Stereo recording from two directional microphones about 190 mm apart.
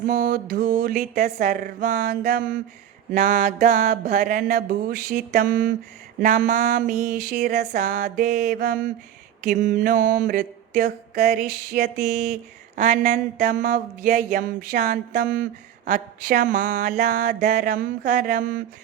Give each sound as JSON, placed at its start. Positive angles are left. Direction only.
{"t": 0.0, "sound": "mantra", "side_deg": -45}